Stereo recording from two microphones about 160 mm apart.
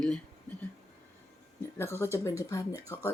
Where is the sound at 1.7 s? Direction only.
15° left (ahead or behind).